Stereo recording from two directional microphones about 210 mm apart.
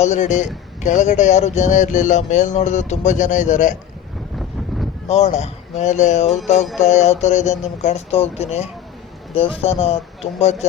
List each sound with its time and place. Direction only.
0.0 s speech: 35° left (ahead or behind)
5.0 s speech: 30° left (ahead or behind)